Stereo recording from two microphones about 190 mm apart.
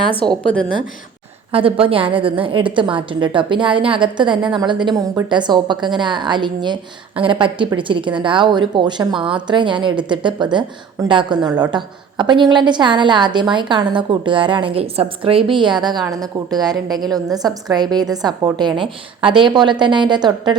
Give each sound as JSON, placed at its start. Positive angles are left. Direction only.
{"t": 0.4, "sound": "a woman's voice", "side_deg": 5}
{"t": 1.5, "sound": "a woman's voice", "side_deg": -30}